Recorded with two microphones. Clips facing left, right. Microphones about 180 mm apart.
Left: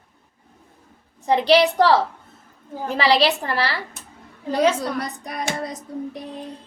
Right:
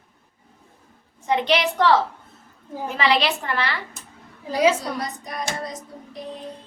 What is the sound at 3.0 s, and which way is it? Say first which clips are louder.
Speech: left 3 dB; 35° left (ahead or behind).